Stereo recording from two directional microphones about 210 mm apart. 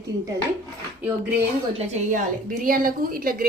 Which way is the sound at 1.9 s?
35° right (ahead or behind).